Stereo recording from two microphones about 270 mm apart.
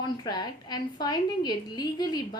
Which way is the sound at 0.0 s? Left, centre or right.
Centre.